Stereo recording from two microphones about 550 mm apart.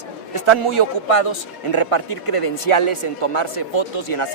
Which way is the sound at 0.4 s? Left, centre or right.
Left.